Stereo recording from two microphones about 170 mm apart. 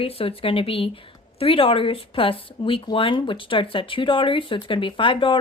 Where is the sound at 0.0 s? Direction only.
35° left (ahead or behind).